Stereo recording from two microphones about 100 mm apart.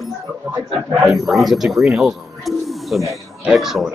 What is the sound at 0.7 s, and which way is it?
Speech, centre (ahead or behind).